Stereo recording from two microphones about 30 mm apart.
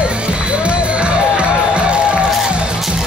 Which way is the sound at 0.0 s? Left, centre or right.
Right.